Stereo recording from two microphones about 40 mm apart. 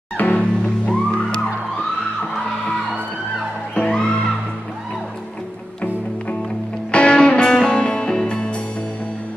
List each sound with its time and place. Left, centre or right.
0.3 s music: left
3.8 s music: left
6.9 s music: left